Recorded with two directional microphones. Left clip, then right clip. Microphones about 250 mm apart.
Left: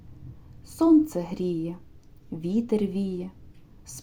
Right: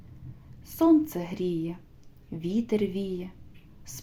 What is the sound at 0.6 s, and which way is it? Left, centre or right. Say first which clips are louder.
Speech: left 2 dB; centre.